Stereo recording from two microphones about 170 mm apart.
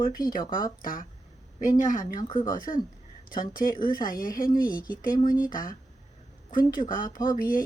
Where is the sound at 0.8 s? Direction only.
55° left (ahead or behind).